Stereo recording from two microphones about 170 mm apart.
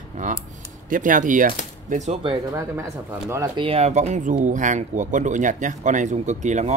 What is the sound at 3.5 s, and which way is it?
Speech, 35° right (ahead or behind).